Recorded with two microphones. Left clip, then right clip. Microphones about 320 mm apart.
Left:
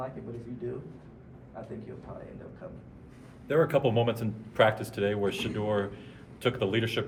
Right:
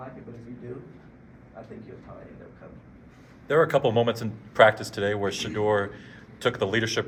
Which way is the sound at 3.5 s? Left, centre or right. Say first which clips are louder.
Right 4 dB; right.